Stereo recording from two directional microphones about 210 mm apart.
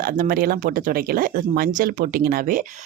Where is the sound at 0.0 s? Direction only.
45° right (ahead or behind).